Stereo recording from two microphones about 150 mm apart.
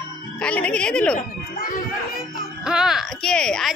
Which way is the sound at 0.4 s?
10° left (ahead or behind).